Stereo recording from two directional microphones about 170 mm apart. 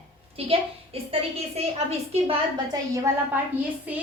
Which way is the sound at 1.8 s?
35° right (ahead or behind).